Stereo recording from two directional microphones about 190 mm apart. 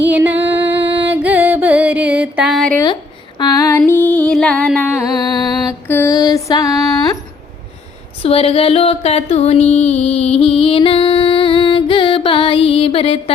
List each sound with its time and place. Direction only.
0.0 s music: 10° right (ahead or behind)
2.8 s female singing: 25° left (ahead or behind); by 5.0 s 5° left (ahead or behind)
5.2 s music: 20° left (ahead or behind)
5.6 s mantra: 15° left (ahead or behind)
8.2 s a sound: 30° left (ahead or behind)